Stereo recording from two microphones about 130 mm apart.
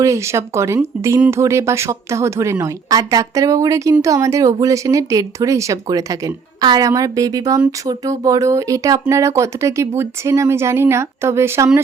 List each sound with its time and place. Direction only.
0.0 s speech: 20° right (ahead or behind)